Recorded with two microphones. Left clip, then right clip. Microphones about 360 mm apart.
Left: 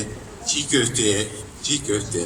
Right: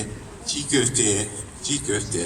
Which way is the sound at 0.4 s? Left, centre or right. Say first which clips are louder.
Left 2 dB; centre.